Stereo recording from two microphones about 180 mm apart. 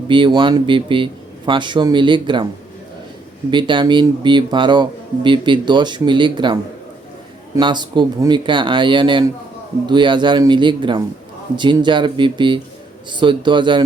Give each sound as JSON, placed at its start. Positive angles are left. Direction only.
{"t": 0.1, "sound": "speech", "side_deg": -25}
{"t": 3.5, "sound": "speech", "side_deg": -25}